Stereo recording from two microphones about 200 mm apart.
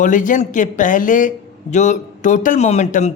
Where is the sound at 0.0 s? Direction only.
40° left (ahead or behind).